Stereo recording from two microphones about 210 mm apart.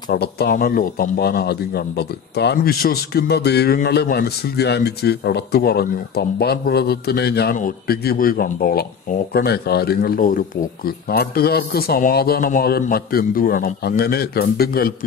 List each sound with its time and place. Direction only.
0.1 s a man's voice: 50° left (ahead or behind)